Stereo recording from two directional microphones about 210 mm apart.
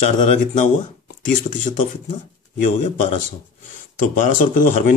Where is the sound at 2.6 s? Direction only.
35° left (ahead or behind).